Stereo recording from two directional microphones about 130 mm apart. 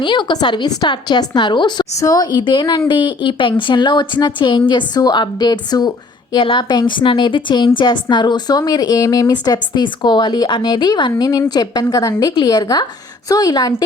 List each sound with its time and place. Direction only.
0.0 s a woman's voice: 35° left (ahead or behind)